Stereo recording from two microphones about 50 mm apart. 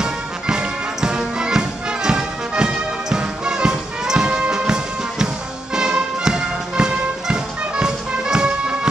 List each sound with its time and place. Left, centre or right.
0.0 s music: centre
5.8 s music: centre